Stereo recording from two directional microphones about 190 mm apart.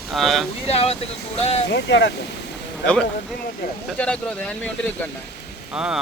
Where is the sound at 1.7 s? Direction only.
65° left (ahead or behind).